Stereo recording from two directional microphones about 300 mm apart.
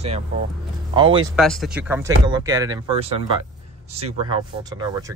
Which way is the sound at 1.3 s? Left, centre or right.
Centre.